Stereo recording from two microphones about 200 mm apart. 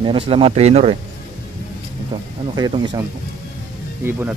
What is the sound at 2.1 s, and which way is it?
Speech, 25° right (ahead or behind).